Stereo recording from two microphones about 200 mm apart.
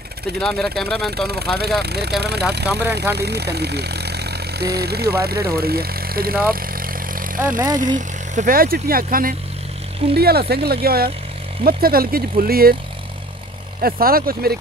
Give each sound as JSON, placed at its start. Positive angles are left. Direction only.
{"t": 0.4, "sound": "speech", "side_deg": 5}
{"t": 1.1, "sound": "speech", "side_deg": -55}
{"t": 6.5, "sound": "vehicle", "side_deg": -45}
{"t": 7.3, "sound": "speech", "side_deg": -10}
{"t": 7.7, "sound": "speech", "side_deg": -40}
{"t": 13.7, "sound": "speech", "side_deg": -45}